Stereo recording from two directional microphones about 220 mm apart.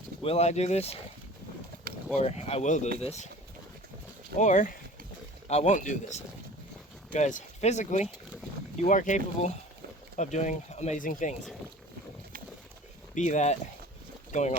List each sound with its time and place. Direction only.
0.3 s speech: 30° left (ahead or behind)
2.1 s speech: 30° left (ahead or behind)
4.4 s speech: 35° left (ahead or behind)
8.0 s boat: 5° right (ahead or behind)
8.8 s speech: 35° left (ahead or behind)
13.1 s speech: 35° left (ahead or behind)